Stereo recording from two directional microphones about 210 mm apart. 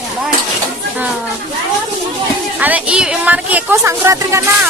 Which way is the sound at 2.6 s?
5° right (ahead or behind).